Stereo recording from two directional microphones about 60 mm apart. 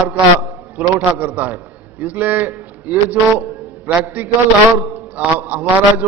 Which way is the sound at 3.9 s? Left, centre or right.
Right.